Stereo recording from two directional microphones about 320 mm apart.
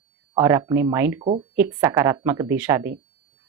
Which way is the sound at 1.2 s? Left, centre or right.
Centre.